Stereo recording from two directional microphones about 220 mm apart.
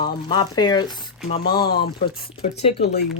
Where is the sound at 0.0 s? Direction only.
20° left (ahead or behind).